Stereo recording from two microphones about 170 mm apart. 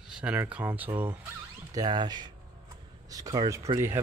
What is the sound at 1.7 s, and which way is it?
Speech, 25° right (ahead or behind).